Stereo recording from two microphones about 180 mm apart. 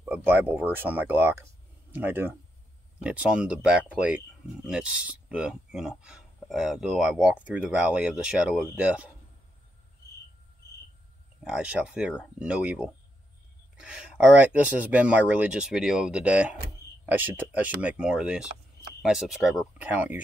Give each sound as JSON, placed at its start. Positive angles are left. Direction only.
{"t": 0.0, "sound": "speech", "side_deg": -10}
{"t": 11.4, "sound": "speech", "side_deg": -5}